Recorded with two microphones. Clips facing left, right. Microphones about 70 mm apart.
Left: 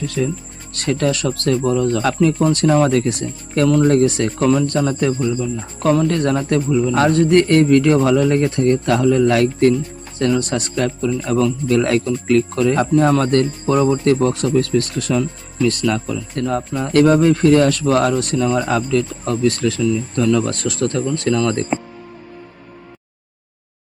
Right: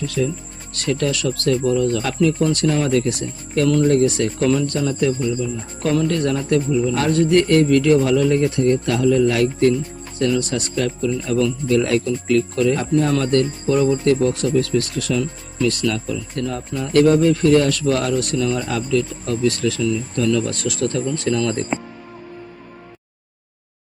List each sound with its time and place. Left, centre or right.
0.2 s speech: left